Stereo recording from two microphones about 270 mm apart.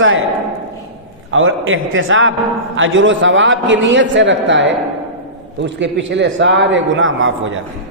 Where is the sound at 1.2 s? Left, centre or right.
Right.